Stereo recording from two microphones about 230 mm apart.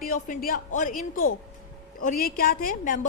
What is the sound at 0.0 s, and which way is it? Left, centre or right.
A woman's voice, left.